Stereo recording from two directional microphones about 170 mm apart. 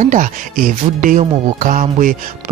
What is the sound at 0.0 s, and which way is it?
Speech, 50° right (ahead or behind).